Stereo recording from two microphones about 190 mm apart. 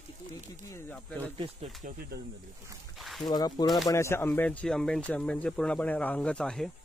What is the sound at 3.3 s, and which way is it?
Speech, 20° left (ahead or behind).